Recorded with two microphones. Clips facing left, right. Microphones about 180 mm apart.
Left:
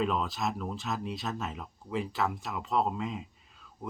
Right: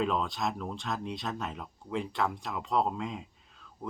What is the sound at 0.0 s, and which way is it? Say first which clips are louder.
Speech: even; centre (ahead or behind).